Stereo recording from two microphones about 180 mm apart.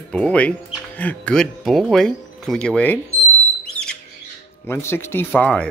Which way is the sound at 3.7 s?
5° left (ahead or behind).